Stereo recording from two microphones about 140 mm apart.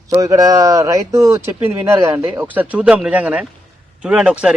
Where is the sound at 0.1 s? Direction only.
25° right (ahead or behind).